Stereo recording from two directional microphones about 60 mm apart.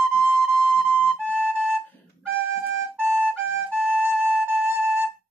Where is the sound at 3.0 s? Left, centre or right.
Right.